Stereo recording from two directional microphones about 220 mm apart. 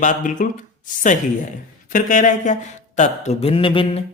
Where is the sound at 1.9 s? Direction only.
35° left (ahead or behind).